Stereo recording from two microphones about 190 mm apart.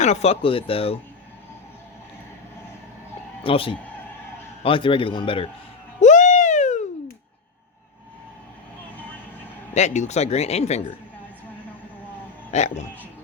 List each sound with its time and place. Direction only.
0.0 s speech: 35° left (ahead or behind)
3.4 s a man's voice: 30° left (ahead or behind)
6.0 s a sound: 40° left (ahead or behind)
9.7 s speech: 40° left (ahead or behind)
12.5 s speech: 35° left (ahead or behind)